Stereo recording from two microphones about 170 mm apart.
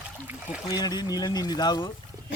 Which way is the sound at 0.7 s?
25° left (ahead or behind).